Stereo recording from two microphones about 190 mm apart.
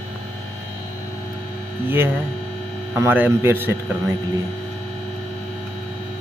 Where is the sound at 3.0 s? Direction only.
10° right (ahead or behind).